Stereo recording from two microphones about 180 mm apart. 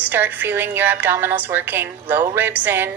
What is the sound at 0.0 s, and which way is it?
Speech, 10° right (ahead or behind).